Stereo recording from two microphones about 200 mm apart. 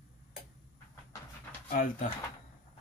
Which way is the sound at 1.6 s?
45° left (ahead or behind).